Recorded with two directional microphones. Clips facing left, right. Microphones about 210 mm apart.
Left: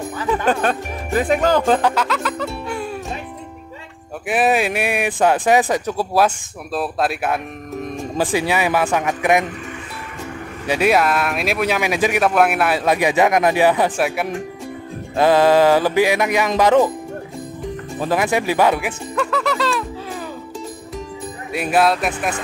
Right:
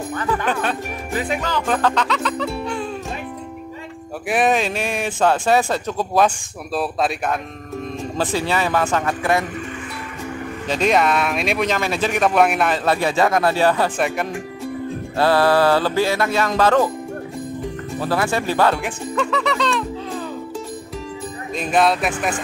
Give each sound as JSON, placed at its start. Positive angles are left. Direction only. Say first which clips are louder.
{"t": 0.5, "sound": "speech", "louder": "left 4 dB", "side_deg": 45}
{"t": 1.8, "sound": "speech", "louder": "left 1 dB", "side_deg": 10}
{"t": 2.0, "sound": "music", "louder": "even", "side_deg": 0}
{"t": 4.3, "sound": "speech", "louder": "left 1 dB", "side_deg": 5}
{"t": 7.8, "sound": "speech", "louder": "left 2 dB", "side_deg": 15}
{"t": 10.7, "sound": "speech", "louder": "left 1 dB", "side_deg": 5}
{"t": 15.1, "sound": "speech", "louder": "left 3 dB", "side_deg": 15}
{"t": 18.0, "sound": "speech", "louder": "left 2 dB", "side_deg": 15}
{"t": 21.5, "sound": "music", "louder": "left 1 dB", "side_deg": 5}